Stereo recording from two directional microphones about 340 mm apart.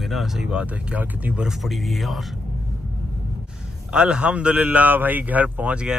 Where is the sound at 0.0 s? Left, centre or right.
Centre.